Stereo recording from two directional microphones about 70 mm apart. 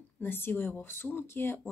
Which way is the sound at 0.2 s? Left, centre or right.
Left.